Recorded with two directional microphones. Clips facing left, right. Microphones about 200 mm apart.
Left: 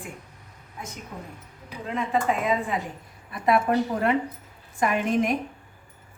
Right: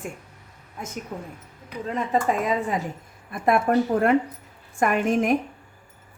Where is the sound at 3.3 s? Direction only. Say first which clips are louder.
Right 2 dB; 50° right (ahead or behind).